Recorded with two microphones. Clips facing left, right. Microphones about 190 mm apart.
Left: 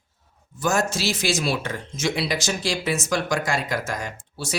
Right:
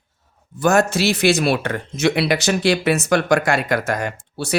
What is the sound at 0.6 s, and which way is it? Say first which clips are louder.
Speech: right 7 dB; 60° right (ahead or behind).